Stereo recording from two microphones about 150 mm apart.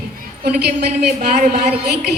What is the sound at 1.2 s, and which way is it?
Speech, 55° right (ahead or behind).